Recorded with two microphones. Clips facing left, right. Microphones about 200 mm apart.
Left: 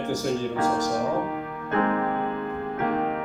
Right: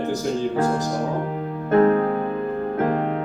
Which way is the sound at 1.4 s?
35° right (ahead or behind).